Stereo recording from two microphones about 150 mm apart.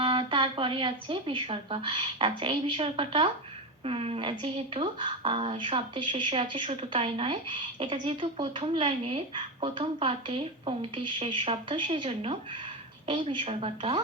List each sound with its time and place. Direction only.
0.0 s speech: 35° right (ahead or behind)